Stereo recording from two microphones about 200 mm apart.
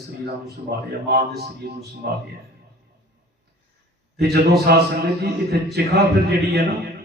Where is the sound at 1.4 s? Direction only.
50° right (ahead or behind).